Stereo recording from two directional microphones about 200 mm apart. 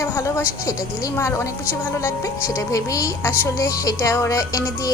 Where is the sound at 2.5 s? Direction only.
15° left (ahead or behind).